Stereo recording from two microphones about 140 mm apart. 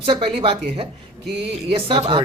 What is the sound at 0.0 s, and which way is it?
Speech, 45° right (ahead or behind).